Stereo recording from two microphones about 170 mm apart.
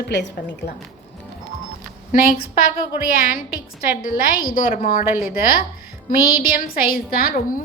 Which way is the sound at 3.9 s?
60° left (ahead or behind).